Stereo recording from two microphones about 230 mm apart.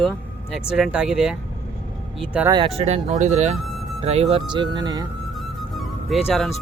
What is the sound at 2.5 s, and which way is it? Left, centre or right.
Speech, right.